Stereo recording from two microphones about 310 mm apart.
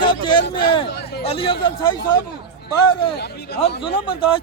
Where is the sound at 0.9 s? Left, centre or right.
Left.